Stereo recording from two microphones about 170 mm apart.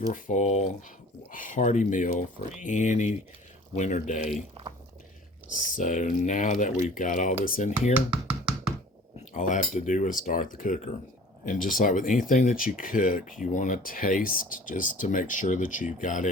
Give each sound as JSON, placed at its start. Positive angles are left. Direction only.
{"t": 0.1, "sound": "speech", "side_deg": 45}
{"t": 5.5, "sound": "speech", "side_deg": 50}
{"t": 7.9, "sound": "knock", "side_deg": -10}
{"t": 9.3, "sound": "speech", "side_deg": 50}